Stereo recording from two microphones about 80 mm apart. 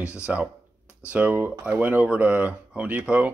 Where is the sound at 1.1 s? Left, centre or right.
Centre.